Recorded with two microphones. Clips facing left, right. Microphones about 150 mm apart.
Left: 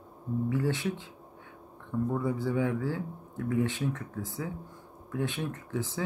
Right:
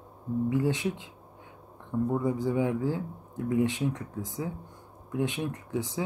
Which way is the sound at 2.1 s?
15° right (ahead or behind).